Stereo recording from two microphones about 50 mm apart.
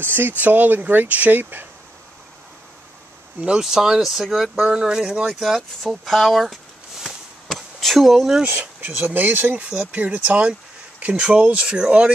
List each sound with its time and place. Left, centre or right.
0.0 s speech: right
3.5 s speech: centre
4.6 s speech: centre
7.4 s a sound: centre
8.5 s speech: right